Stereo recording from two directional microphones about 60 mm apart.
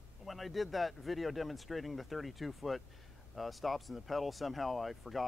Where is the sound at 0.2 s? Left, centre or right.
Centre.